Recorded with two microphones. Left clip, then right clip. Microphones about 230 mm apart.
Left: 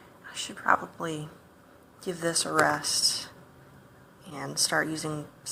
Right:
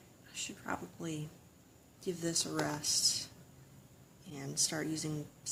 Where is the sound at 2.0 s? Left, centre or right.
Right.